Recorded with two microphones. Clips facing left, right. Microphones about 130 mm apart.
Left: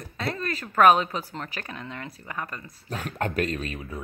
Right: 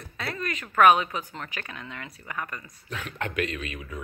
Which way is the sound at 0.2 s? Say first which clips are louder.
Left 3 dB; 30° left (ahead or behind).